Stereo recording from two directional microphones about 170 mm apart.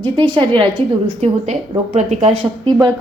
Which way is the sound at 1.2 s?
40° right (ahead or behind).